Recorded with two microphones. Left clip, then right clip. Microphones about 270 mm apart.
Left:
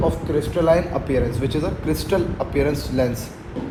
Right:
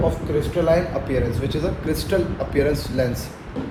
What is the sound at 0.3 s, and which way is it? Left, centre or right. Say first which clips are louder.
A man's voice: left 1 dB; left.